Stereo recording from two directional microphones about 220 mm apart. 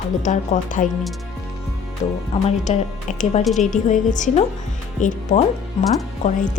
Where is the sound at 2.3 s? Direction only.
25° left (ahead or behind).